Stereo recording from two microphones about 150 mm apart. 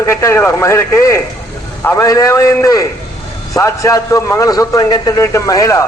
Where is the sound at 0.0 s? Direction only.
20° left (ahead or behind).